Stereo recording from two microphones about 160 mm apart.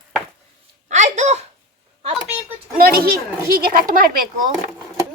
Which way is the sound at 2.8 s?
70° right (ahead or behind).